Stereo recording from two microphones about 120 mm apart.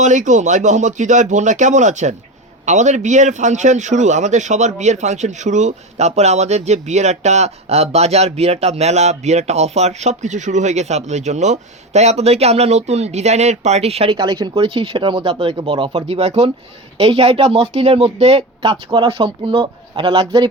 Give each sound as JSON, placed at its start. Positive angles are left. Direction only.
{"t": 0.0, "sound": "a man's voice", "side_deg": -90}
{"t": 14.2, "sound": "speech", "side_deg": -35}
{"t": 14.5, "sound": "speech", "side_deg": -55}
{"t": 16.0, "sound": "speech", "side_deg": -65}